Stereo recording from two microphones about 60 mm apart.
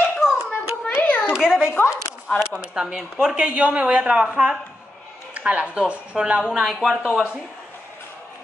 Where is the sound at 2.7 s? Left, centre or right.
Centre.